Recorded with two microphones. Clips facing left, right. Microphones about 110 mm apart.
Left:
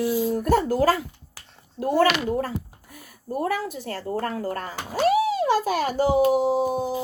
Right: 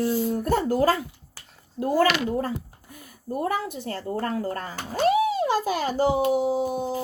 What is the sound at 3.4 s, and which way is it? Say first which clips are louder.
Speech: left 1 dB; 25° right (ahead or behind).